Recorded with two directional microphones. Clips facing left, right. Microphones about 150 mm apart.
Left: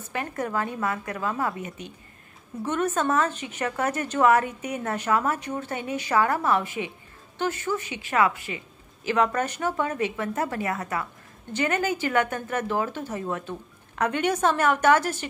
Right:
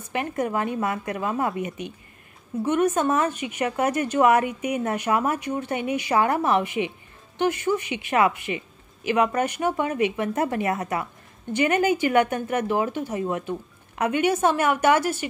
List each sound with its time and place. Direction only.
0.1 s a woman's voice: 20° right (ahead or behind)